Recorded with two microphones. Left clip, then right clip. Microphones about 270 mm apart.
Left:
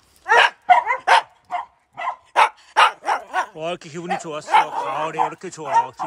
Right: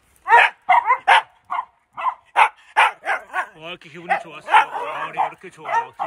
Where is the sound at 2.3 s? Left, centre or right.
Left.